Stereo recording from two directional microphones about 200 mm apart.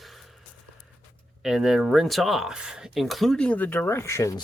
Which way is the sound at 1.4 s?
Centre (ahead or behind).